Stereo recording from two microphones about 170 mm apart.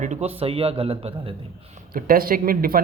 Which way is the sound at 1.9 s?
55° right (ahead or behind).